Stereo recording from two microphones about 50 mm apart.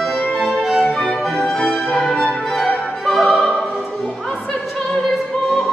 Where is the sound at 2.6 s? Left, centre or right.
Left.